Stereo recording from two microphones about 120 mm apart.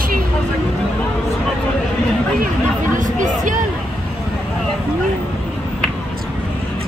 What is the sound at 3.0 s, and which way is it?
Speech, 90° right.